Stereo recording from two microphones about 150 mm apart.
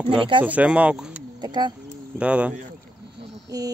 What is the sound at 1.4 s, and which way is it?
Speech, 30° right (ahead or behind).